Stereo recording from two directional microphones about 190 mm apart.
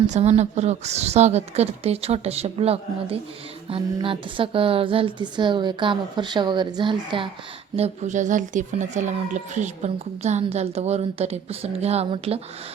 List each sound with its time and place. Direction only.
0.1 s speech: 35° right (ahead or behind)
7.8 s speech: 40° right (ahead or behind)